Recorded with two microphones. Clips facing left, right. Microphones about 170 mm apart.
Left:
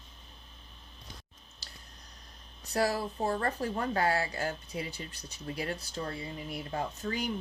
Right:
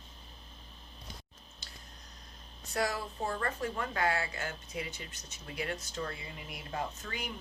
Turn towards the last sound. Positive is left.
turn(degrees=35)  # may be behind; listen again after turning